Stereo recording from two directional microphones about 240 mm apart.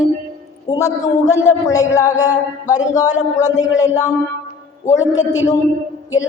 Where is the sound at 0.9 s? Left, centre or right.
Left.